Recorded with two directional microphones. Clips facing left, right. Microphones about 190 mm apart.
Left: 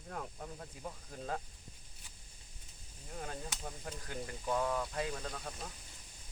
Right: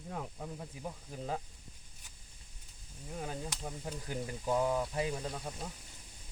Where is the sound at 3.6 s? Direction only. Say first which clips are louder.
Right 4 dB; 15° right (ahead or behind).